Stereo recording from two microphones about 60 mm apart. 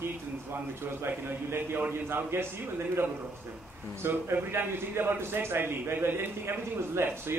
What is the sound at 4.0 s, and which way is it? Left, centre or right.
A man's voice, right.